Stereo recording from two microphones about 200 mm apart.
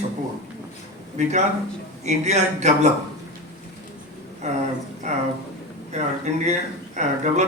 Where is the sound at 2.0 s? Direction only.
35° right (ahead or behind).